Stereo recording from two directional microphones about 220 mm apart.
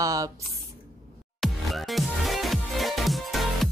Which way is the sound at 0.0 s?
15° right (ahead or behind).